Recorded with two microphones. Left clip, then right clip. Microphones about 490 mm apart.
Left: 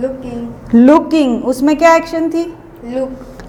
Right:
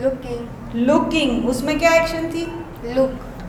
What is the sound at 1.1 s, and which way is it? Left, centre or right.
A woman's voice, left.